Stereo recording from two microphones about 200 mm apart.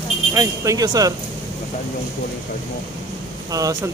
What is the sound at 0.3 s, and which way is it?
Speech, 15° right (ahead or behind).